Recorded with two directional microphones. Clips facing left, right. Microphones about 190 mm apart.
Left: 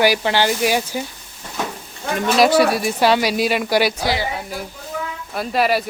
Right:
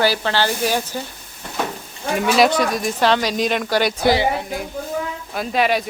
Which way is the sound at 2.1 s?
5° right (ahead or behind).